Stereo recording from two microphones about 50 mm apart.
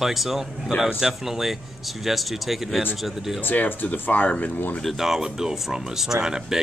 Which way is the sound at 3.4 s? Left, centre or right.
Left.